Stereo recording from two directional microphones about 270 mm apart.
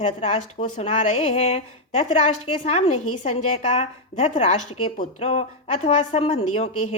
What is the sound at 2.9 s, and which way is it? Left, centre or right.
Speech, left.